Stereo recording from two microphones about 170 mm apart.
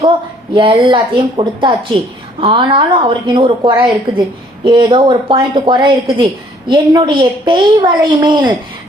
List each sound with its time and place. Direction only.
0.5 s speech: 30° right (ahead or behind)